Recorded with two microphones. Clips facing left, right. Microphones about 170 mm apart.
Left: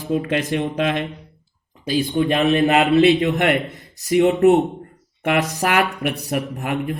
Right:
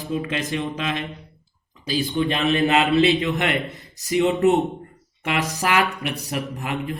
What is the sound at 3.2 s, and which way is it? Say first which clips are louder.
Mantra: left 5 dB; 60° left (ahead or behind).